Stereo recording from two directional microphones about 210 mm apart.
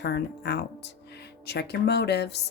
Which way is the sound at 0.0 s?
55° left (ahead or behind).